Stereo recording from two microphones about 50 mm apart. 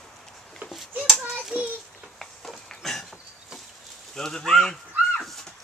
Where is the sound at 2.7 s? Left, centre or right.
Centre.